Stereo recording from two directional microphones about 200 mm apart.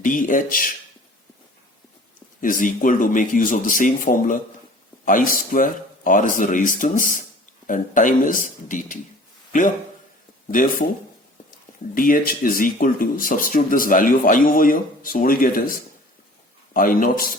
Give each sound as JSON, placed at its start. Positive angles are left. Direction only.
{"t": 0.0, "sound": "speech", "side_deg": 40}
{"t": 2.4, "sound": "a man's voice", "side_deg": 40}
{"t": 11.9, "sound": "speech", "side_deg": 45}
{"t": 16.7, "sound": "speech", "side_deg": 45}